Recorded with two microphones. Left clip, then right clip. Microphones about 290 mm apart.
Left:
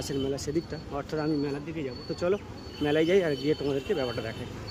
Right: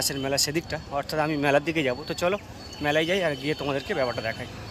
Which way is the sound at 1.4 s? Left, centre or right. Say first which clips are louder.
Right 11 dB; centre.